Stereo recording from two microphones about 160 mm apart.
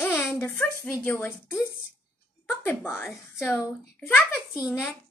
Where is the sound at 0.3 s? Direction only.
15° left (ahead or behind).